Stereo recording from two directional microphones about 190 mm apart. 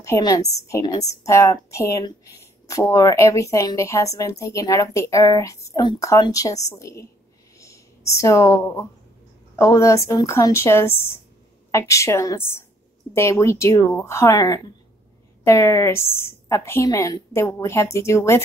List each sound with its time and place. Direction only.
0.0 s a woman's voice: 15° left (ahead or behind)
7.5 s a sound: 15° left (ahead or behind)
9.6 s a woman's voice: 15° left (ahead or behind)